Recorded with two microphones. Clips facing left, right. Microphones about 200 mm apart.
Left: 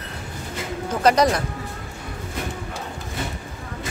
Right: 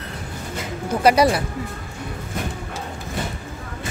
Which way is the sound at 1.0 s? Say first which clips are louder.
Right 2 dB; 10° right (ahead or behind).